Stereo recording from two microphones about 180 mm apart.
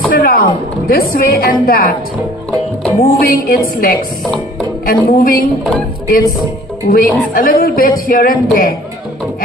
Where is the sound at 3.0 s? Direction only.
50° left (ahead or behind).